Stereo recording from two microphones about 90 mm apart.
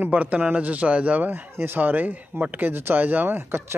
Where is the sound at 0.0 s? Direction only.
15° right (ahead or behind).